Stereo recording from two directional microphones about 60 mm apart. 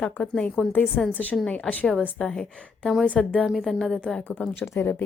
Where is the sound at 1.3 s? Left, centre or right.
Centre.